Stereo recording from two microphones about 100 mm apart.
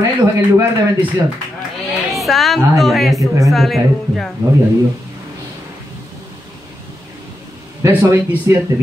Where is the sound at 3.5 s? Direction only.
Centre (ahead or behind).